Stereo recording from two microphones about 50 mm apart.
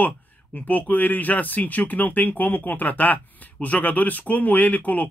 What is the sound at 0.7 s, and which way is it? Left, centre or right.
Speech, left.